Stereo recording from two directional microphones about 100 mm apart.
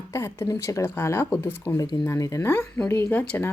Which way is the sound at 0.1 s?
30° left (ahead or behind).